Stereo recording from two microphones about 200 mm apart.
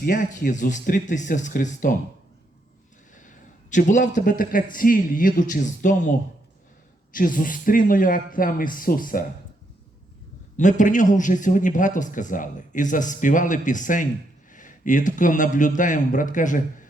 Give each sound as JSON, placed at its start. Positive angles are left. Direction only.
{"t": 0.0, "sound": "a man's voice", "side_deg": 40}
{"t": 3.2, "sound": "speech", "side_deg": 40}
{"t": 10.6, "sound": "a man's voice", "side_deg": 40}